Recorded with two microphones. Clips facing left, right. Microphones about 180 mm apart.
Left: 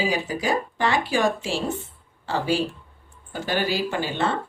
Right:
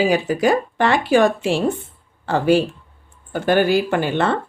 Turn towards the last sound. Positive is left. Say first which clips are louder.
# right 6 dB
turn(degrees=-60)  # may be behind; listen again after turning